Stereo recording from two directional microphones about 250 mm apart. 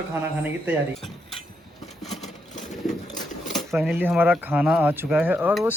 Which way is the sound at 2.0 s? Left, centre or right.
Centre.